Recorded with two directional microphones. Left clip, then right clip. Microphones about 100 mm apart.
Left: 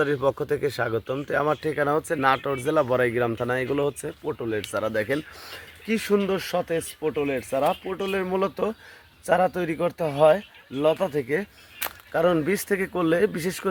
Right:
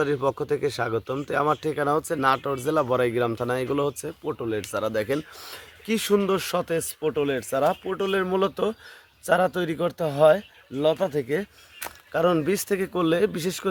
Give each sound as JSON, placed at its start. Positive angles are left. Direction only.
{"t": 0.3, "sound": "speech", "side_deg": -15}
{"t": 2.0, "sound": "speech", "side_deg": -10}
{"t": 2.2, "sound": "speech", "side_deg": -20}
{"t": 2.6, "sound": "speech", "side_deg": -10}
{"t": 2.9, "sound": "speech", "side_deg": -25}
{"t": 6.2, "sound": "speech", "side_deg": -50}
{"t": 7.3, "sound": "speech", "side_deg": -35}
{"t": 12.1, "sound": "speech", "side_deg": -10}